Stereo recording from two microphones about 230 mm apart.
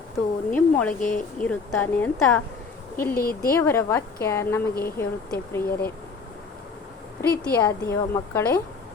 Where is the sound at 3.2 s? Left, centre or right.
Left.